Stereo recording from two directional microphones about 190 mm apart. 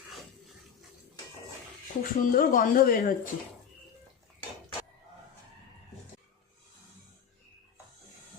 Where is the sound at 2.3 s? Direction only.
45° left (ahead or behind).